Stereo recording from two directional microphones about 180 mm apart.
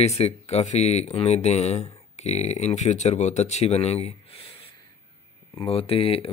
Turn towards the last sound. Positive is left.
turn(degrees=30)  # may be behind; listen again after turning